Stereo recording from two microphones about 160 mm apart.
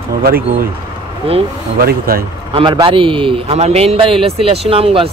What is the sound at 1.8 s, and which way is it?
Speech, 70° right (ahead or behind).